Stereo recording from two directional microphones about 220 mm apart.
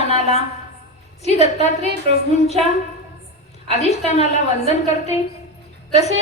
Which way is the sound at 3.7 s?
30° left (ahead or behind).